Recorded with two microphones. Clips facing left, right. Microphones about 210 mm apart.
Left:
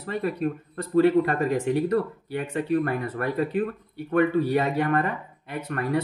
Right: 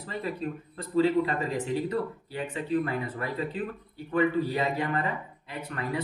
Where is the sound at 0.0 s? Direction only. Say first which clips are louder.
Left 6 dB; 55° left (ahead or behind).